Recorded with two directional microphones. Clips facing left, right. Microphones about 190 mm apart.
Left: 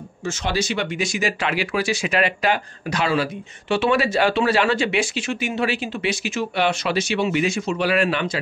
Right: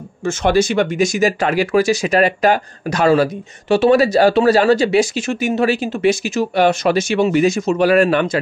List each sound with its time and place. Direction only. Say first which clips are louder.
0.2 s speech: right 9 dB; 55° right (ahead or behind)